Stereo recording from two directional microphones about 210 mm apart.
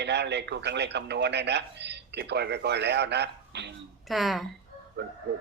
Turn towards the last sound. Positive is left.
turn(degrees=-50)  # may be behind; listen again after turning